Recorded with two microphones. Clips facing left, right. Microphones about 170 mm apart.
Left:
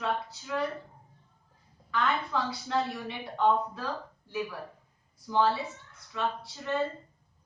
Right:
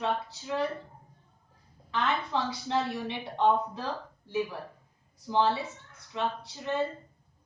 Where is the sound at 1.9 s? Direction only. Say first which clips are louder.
Even; 25° right (ahead or behind).